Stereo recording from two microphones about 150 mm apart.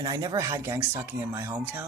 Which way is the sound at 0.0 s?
25° right (ahead or behind).